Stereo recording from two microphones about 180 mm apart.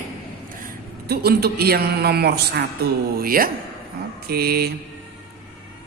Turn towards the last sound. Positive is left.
turn(degrees=-60)  # may be behind; listen again after turning